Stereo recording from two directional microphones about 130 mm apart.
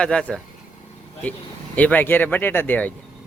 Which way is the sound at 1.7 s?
10° left (ahead or behind).